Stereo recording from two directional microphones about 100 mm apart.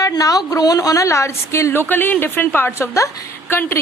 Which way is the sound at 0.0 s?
35° left (ahead or behind).